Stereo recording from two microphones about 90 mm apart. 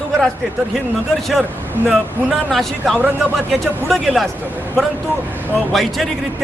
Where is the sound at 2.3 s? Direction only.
Centre (ahead or behind).